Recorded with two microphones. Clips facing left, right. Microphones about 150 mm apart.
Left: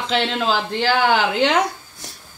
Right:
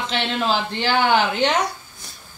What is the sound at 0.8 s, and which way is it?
Speech, 90° left.